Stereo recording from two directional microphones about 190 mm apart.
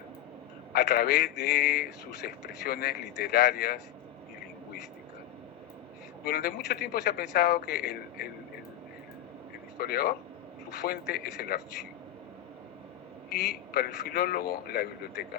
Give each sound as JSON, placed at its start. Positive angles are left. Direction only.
{"t": 0.7, "sound": "a man's voice", "side_deg": 55}
{"t": 6.2, "sound": "a man's voice", "side_deg": 50}
{"t": 9.7, "sound": "a man's voice", "side_deg": 55}
{"t": 13.3, "sound": "a man's voice", "side_deg": 50}